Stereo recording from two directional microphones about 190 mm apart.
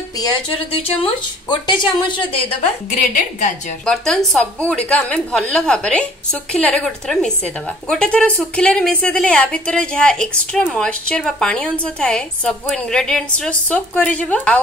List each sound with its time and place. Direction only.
0.2 s speech: 25° left (ahead or behind)
3.0 s a woman's voice: 40° left (ahead or behind)
3.8 s a woman's voice: 5° left (ahead or behind)